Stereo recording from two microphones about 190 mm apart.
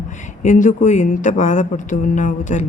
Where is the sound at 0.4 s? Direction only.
40° left (ahead or behind).